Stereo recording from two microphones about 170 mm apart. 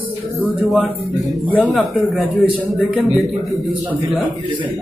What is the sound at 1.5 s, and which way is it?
Speech, centre (ahead or behind).